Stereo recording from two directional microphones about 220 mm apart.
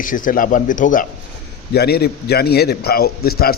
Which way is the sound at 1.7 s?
45° left (ahead or behind).